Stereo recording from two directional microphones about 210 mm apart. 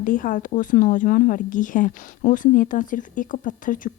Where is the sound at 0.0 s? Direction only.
40° left (ahead or behind).